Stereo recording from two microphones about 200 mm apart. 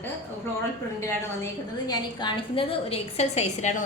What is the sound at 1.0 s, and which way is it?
A woman's voice, 15° left (ahead or behind).